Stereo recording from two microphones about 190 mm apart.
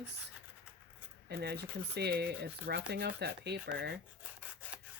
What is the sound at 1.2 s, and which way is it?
Speech, 60° right (ahead or behind).